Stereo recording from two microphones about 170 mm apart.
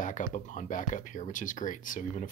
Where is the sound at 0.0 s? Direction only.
50° left (ahead or behind).